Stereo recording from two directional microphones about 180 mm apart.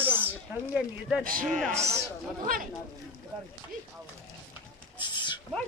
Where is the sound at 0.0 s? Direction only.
10° right (ahead or behind).